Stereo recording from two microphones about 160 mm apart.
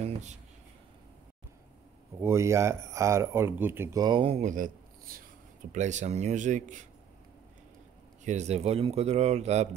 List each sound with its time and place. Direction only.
0.0 s a sound: 45° right (ahead or behind)
2.1 s speech: 15° right (ahead or behind); by 4.4 s 30° right (ahead or behind)
4.4 s speech: 55° right (ahead or behind)
5.7 s a man's voice: 50° right (ahead or behind)
8.3 s a man's voice: 45° right (ahead or behind)